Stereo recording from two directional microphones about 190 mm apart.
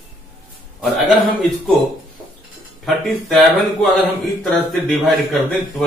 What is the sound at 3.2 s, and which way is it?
Speech, centre (ahead or behind).